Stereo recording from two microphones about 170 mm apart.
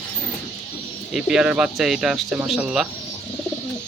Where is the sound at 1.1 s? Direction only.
5° right (ahead or behind).